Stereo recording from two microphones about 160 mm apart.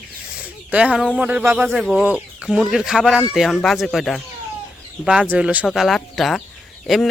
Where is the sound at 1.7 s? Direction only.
Centre (ahead or behind).